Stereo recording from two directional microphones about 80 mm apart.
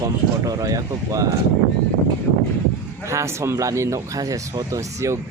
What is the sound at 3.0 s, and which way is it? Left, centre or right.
Speech, right.